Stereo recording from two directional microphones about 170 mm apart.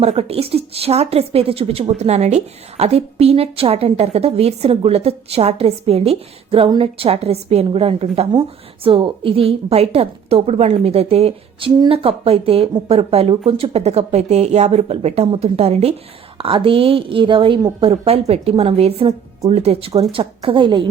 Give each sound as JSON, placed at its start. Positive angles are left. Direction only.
{"t": 0.0, "sound": "a woman's voice", "side_deg": -35}